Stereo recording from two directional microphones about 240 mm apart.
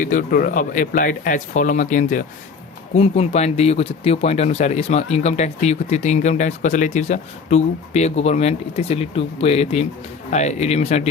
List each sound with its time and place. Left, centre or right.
0.0 s speech: left